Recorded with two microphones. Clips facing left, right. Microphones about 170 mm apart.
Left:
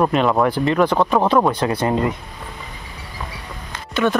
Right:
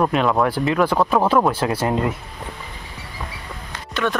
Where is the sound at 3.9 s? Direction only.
Centre (ahead or behind).